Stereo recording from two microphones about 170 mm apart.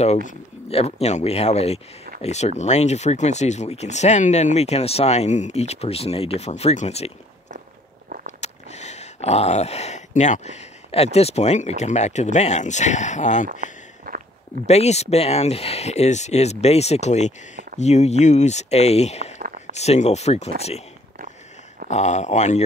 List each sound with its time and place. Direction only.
0.0 s speech: 45° left (ahead or behind)
8.4 s speech: 40° left (ahead or behind)
14.0 s walk: 60° right (ahead or behind)
14.7 s speech: 40° left (ahead or behind)
21.8 s speech: 45° left (ahead or behind)